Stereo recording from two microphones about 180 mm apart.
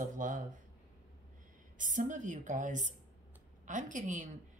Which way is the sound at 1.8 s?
45° right (ahead or behind).